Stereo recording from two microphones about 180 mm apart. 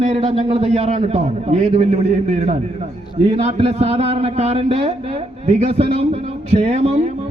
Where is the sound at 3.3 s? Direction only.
35° right (ahead or behind).